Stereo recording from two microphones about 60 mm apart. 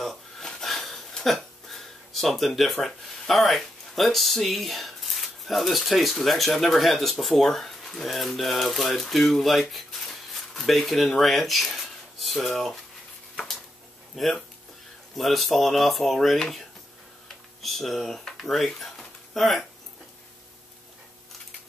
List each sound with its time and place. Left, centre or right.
0.0 s speech: centre
14.1 s speech: centre